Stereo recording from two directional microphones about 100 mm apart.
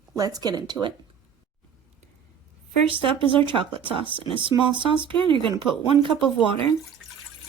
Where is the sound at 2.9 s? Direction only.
60° right (ahead or behind).